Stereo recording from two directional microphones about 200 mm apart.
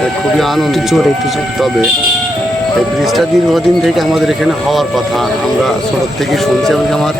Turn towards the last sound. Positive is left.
turn(degrees=0)  # may be behind; listen again after turning